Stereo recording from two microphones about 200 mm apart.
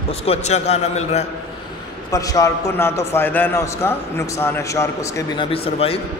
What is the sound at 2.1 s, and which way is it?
A man's voice, 15° left (ahead or behind).